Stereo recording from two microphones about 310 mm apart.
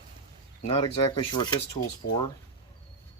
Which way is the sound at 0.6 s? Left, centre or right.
Centre.